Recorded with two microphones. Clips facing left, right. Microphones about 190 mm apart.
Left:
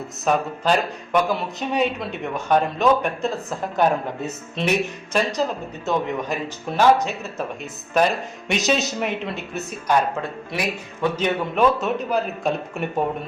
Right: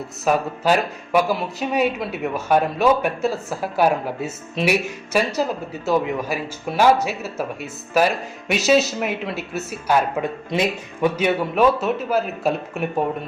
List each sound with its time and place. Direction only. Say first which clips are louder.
0.3 s speech: right 1 dB; 5° right (ahead or behind)
10.5 s speech: right 5 dB; 20° right (ahead or behind)
11.2 s speech: right 1 dB; 5° right (ahead or behind)